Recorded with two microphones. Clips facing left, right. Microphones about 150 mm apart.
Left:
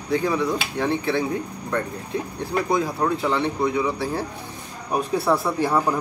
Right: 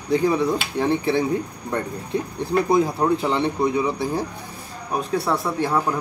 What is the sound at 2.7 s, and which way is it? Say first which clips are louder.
Speech: right 3 dB; 20° right (ahead or behind).